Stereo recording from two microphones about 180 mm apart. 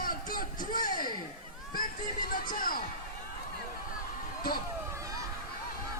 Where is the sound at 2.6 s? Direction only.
55° left (ahead or behind).